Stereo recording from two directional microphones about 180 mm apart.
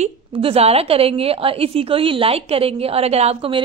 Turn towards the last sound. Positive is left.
turn(degrees=-35)  # may be behind; listen again after turning